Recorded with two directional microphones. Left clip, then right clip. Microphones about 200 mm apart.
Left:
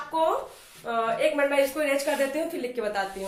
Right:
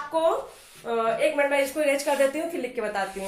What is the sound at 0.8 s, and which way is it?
Speech, 10° right (ahead or behind).